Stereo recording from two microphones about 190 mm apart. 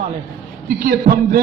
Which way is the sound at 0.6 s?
45° right (ahead or behind).